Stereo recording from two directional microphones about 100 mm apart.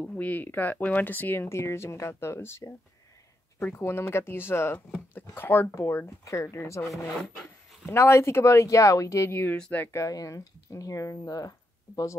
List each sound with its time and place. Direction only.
0.0 s speech: 15° left (ahead or behind)
9.9 s speech: 35° left (ahead or behind)